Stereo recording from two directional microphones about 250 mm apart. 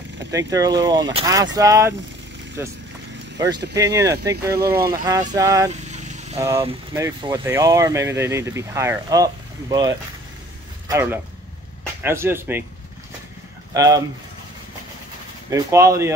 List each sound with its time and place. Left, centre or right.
0.3 s speech: centre
5.7 s vehicle: right
6.4 s speech: centre
13.7 s speech: centre
15.5 s speech: centre